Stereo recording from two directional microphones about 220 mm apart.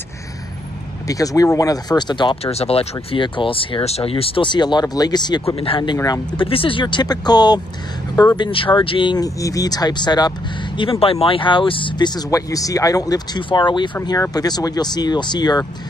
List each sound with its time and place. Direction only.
1.0 s speech: 15° left (ahead or behind)